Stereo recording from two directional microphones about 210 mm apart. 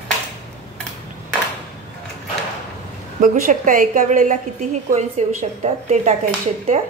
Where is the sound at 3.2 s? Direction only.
40° right (ahead or behind).